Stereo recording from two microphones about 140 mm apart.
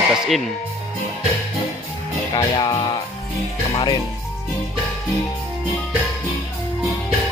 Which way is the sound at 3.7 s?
30° left (ahead or behind).